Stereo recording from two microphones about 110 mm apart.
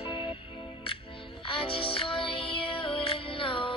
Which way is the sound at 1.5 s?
55° left (ahead or behind).